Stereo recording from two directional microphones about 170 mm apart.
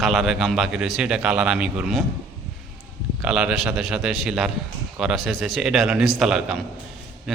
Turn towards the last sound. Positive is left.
turn(degrees=0)  # may be behind; listen again after turning